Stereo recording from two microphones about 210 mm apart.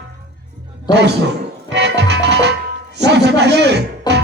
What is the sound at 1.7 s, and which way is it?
Music, 55° right (ahead or behind).